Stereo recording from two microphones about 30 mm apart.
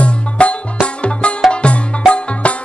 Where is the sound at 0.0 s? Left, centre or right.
Left.